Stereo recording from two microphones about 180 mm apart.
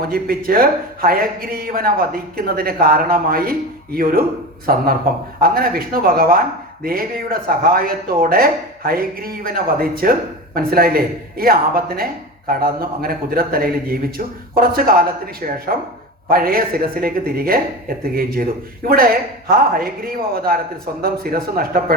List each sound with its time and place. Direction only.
0.1 s a man's voice: 55° right (ahead or behind)